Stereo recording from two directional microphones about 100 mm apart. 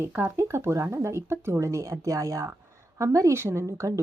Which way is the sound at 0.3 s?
25° right (ahead or behind).